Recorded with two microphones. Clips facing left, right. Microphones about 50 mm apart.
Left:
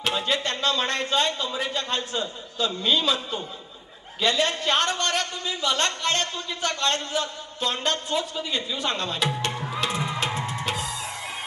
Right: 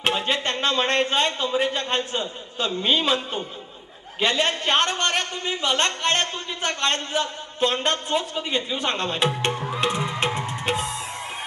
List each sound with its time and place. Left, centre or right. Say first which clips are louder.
0.0 s a man's voice: right 2 dB; right